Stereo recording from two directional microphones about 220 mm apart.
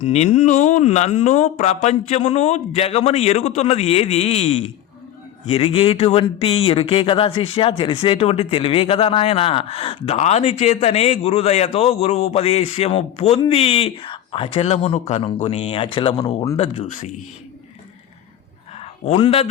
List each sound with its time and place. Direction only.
0.0 s speech: 30° left (ahead or behind)
18.8 s a man's voice: 25° left (ahead or behind)